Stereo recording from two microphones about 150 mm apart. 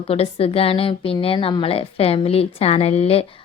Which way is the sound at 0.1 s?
40° left (ahead or behind).